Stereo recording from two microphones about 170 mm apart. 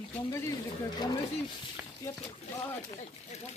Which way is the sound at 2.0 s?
20° left (ahead or behind).